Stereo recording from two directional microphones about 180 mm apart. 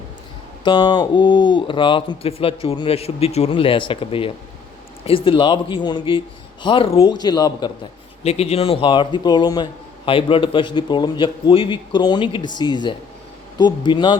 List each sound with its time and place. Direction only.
0.6 s speech: 25° left (ahead or behind)
8.2 s speech: 35° left (ahead or behind)